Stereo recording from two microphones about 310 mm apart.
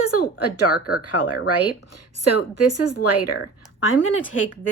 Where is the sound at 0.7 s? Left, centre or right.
Left.